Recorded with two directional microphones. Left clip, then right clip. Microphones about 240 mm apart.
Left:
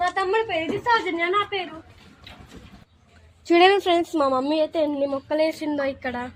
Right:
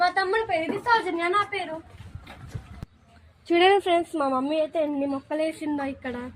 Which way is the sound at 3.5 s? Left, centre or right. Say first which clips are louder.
Left 3 dB; left.